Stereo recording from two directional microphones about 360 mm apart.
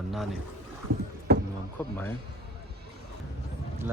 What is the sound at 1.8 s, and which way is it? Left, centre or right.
Speech, centre.